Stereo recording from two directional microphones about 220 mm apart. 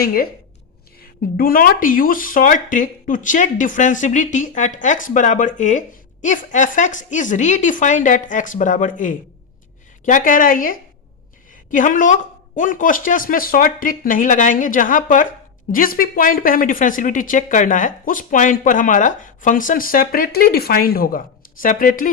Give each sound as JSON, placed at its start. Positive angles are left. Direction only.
{"t": 0.0, "sound": "speech", "side_deg": 40}
{"t": 1.4, "sound": "speech", "side_deg": 40}